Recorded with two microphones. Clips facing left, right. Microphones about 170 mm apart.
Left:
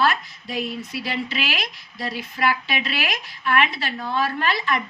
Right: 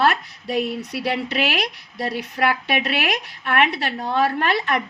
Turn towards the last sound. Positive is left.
turn(degrees=-60)  # may be behind; listen again after turning